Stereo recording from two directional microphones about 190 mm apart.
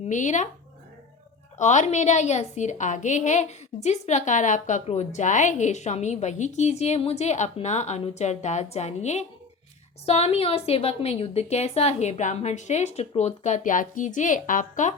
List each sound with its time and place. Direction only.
0.0 s speech: 40° left (ahead or behind)
1.5 s a woman's voice: 40° left (ahead or behind)